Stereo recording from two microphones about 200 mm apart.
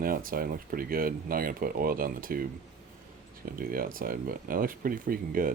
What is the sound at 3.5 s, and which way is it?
Speech, 45° right (ahead or behind).